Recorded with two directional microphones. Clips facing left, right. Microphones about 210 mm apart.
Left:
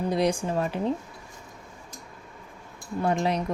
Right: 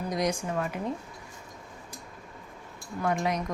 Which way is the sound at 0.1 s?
30° left (ahead or behind).